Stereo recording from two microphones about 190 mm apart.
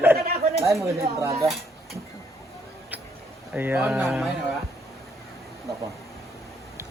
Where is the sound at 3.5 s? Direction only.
10° right (ahead or behind).